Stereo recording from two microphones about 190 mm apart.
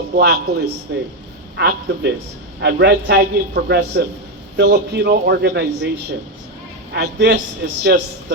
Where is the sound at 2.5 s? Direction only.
65° right (ahead or behind).